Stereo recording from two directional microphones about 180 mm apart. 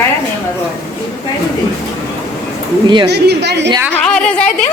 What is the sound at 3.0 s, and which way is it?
Speech, 65° right (ahead or behind).